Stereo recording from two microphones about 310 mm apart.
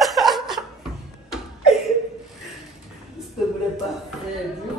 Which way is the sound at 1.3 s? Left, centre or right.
Centre.